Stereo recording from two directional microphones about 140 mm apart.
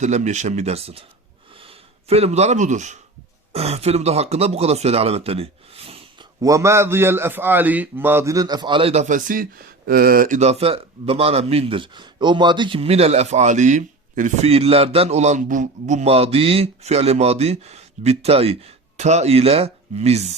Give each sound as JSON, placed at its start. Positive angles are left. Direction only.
{"t": 0.0, "sound": "a man's voice", "side_deg": -55}
{"t": 3.5, "sound": "speech", "side_deg": -45}
{"t": 6.4, "sound": "a man's voice", "side_deg": -20}
{"t": 14.5, "sound": "a man's voice", "side_deg": -45}